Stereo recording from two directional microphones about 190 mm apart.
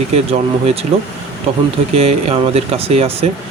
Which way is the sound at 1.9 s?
35° right (ahead or behind).